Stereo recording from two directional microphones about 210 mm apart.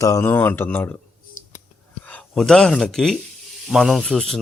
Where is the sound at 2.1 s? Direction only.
5° left (ahead or behind).